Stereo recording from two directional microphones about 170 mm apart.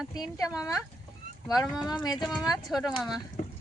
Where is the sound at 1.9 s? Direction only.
25° left (ahead or behind).